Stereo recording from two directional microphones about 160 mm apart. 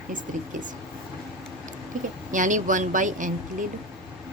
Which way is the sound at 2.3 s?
55° right (ahead or behind).